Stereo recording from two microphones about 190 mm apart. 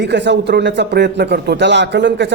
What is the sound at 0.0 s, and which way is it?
Speech, 65° right (ahead or behind).